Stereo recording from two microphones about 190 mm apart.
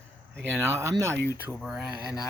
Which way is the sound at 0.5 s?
15° right (ahead or behind).